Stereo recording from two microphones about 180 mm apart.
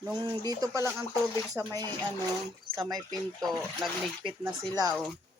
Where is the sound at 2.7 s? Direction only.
20° right (ahead or behind).